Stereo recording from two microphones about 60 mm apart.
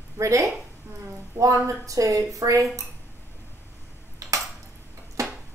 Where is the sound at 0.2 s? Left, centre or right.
Right.